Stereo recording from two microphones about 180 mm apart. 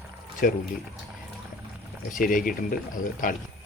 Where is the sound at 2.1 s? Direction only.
50° left (ahead or behind).